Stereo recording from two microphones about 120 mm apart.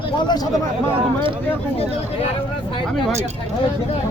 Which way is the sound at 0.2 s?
35° left (ahead or behind).